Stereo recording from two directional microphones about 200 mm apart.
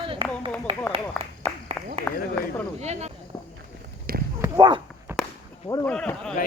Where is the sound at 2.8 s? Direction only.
35° right (ahead or behind).